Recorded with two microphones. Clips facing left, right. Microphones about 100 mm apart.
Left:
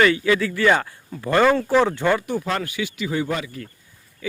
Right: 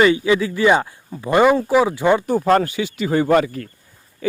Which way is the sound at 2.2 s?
40° right (ahead or behind).